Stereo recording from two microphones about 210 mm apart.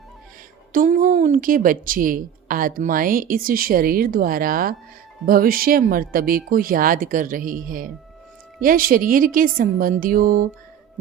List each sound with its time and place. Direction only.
0.7 s a woman's voice: 40° right (ahead or behind)